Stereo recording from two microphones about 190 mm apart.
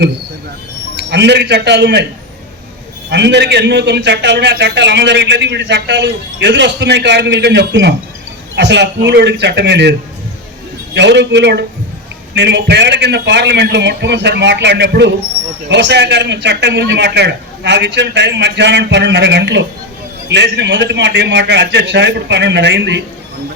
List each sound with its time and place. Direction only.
0.9 s a man's voice: 65° right (ahead or behind)
3.1 s a man's voice: 65° right (ahead or behind)
10.9 s a man's voice: 65° right (ahead or behind)